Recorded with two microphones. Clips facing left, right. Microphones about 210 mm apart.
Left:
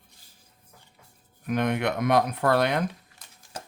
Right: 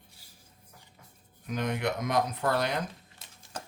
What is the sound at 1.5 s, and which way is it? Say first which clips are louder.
Speech: left 5 dB; 60° left (ahead or behind).